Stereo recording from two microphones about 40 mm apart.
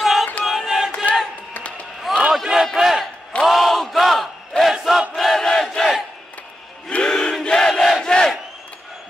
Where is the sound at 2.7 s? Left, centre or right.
Centre.